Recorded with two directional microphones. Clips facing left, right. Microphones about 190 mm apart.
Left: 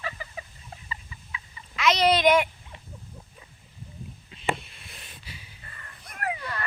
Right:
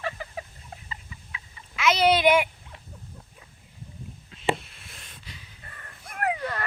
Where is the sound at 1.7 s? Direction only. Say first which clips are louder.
Right 1 dB; 5° right (ahead or behind).